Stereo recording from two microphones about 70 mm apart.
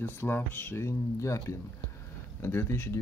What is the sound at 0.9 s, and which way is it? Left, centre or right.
Speech, left.